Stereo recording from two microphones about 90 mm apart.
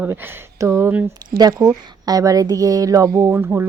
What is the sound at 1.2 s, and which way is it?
Speech, 50° right (ahead or behind).